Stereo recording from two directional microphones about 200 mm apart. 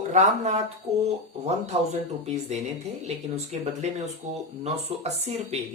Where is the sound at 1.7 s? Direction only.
30° right (ahead or behind).